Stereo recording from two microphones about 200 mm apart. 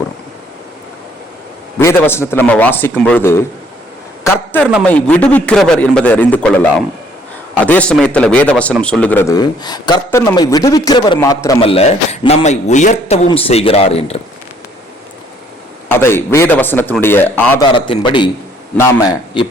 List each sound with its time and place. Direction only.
1.8 s a man's voice: 15° left (ahead or behind)
11.6 s a man's voice: 30° left (ahead or behind)
15.9 s a man's voice: 10° left (ahead or behind)
17.7 s a man's voice: 25° left (ahead or behind)